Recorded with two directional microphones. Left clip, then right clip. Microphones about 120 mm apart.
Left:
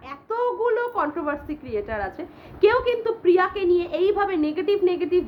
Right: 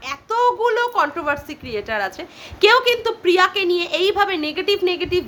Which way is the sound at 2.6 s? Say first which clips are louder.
Right 5 dB; 35° right (ahead or behind).